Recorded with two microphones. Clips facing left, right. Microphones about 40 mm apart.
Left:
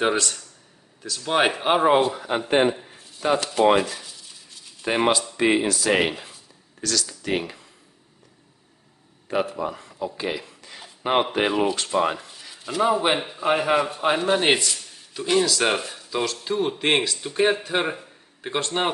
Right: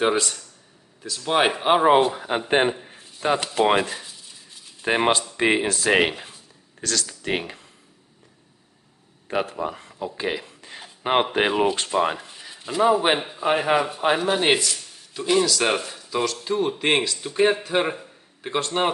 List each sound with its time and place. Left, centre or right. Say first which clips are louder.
0.0 s a man's voice: right 1 dB; centre
2.4 s a man's voice: left 1 dB; right
9.3 s speech: left 1 dB; right
9.8 s speech: left 1 dB; right
10.2 s a sound: right 1 dB; right
11.3 s speech: right 1 dB; right
12.2 s a sound: right 1 dB; centre
12.8 s a man's voice: right 2 dB; centre